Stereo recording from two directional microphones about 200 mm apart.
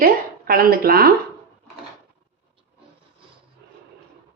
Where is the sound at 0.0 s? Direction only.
45° right (ahead or behind).